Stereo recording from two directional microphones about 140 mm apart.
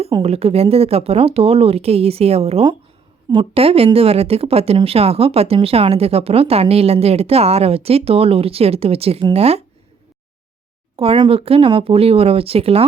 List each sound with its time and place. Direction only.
0.1 s speech: 45° right (ahead or behind)
10.9 s speech: 40° right (ahead or behind)